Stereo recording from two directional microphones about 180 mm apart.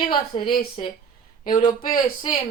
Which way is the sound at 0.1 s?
25° left (ahead or behind).